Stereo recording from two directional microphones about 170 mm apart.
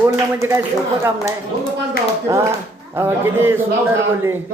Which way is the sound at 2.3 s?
20° right (ahead or behind).